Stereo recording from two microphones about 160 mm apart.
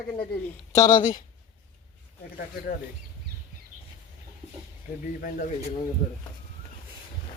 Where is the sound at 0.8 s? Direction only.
55° left (ahead or behind).